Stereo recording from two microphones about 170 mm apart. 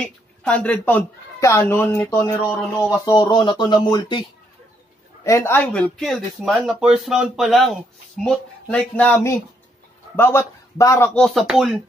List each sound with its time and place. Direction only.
0.0 s a woman's voice: 5° left (ahead or behind); by 4.2 s 25° left (ahead or behind)
5.2 s a man's voice: 15° left (ahead or behind)
11.1 s speech: centre (ahead or behind)